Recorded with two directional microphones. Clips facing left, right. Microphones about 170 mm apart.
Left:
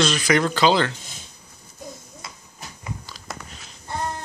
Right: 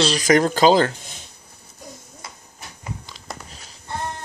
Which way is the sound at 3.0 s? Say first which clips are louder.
Even; 20° right (ahead or behind).